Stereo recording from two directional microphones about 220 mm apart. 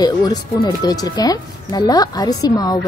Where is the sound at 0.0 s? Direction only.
20° left (ahead or behind).